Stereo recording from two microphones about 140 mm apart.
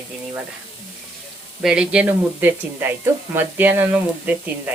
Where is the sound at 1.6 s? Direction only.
5° right (ahead or behind).